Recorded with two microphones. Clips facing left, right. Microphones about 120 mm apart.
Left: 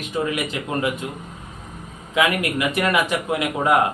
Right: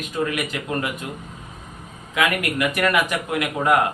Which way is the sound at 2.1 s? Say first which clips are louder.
Left 1 dB; 25° left (ahead or behind).